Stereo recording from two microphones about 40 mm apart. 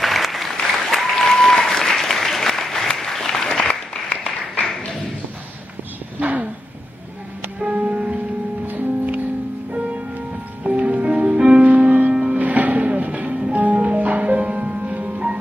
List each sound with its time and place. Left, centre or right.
0.0 s applause: centre
6.1 s a sound: right
7.6 s music: right
8.6 s music: right
10.6 s music: right
11.3 s music: right
11.6 s music: right
12.1 s music: right
12.4 s music: right